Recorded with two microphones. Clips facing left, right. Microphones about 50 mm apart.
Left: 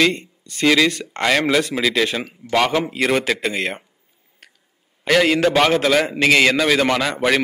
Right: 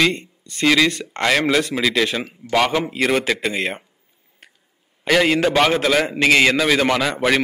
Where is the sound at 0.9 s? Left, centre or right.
Right.